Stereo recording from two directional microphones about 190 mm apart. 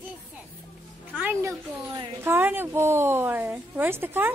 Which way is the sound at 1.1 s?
10° right (ahead or behind).